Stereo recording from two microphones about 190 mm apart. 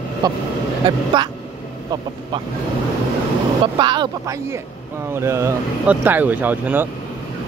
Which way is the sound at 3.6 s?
25° right (ahead or behind).